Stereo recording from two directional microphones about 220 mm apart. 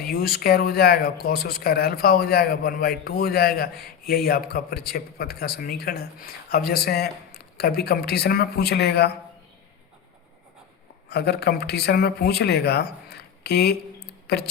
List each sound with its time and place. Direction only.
0.0 s speech: 45° left (ahead or behind)
11.1 s speech: 45° left (ahead or behind)